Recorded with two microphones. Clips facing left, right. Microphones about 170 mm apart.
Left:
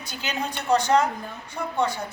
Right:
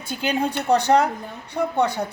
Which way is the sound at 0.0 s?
55° right (ahead or behind).